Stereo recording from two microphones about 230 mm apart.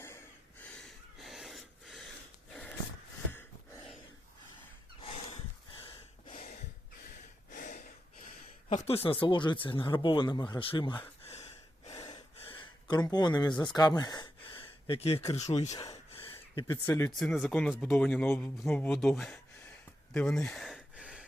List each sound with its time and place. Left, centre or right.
0.6 s gasp: centre
5.0 s snort: left
5.8 s a sound: left
8.7 s speech: left
11.9 s gasp: centre
15.3 s speech: left
15.7 s gasp: centre
16.6 s speech: centre
20.1 s a sound: centre